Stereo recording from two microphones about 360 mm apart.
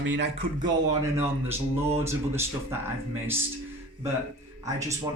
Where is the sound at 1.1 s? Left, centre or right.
Centre.